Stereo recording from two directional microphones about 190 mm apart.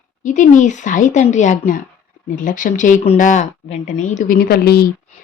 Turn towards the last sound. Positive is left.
turn(degrees=55)  # may be behind; listen again after turning